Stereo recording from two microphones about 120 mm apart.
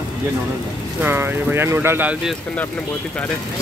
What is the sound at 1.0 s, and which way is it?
Speech, 20° right (ahead or behind).